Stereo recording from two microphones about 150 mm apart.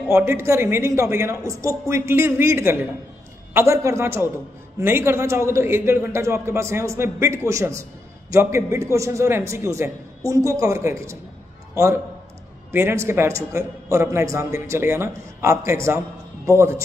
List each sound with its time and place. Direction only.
0.1 s a man's voice: 15° right (ahead or behind)
12.7 s a man's voice: 15° right (ahead or behind)